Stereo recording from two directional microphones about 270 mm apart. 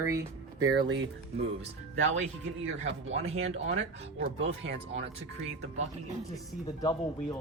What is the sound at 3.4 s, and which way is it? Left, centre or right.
Speech, right.